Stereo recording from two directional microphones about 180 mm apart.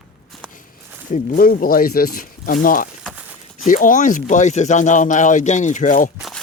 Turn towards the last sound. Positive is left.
turn(degrees=45)  # may be behind; listen again after turning